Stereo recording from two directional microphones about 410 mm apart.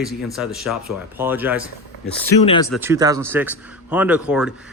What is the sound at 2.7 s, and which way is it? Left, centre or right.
Speech, centre.